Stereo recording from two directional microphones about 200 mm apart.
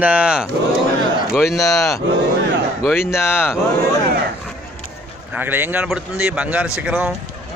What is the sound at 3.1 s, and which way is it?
Speech, 10° left (ahead or behind).